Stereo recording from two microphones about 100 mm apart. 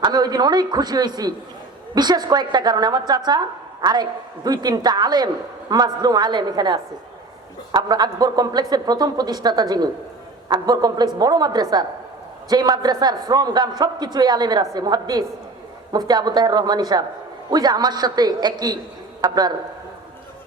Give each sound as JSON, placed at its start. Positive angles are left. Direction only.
{"t": 0.0, "sound": "a man's voice", "side_deg": -45}